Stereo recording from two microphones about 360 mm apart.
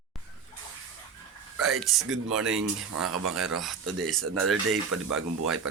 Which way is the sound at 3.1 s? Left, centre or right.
Right.